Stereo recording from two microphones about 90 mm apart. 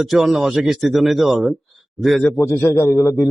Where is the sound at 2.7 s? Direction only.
30° left (ahead or behind).